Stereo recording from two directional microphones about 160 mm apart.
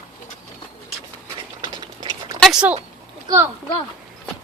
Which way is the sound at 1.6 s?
25° right (ahead or behind).